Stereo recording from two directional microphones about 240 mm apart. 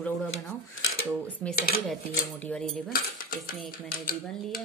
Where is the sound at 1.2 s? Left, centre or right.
Centre.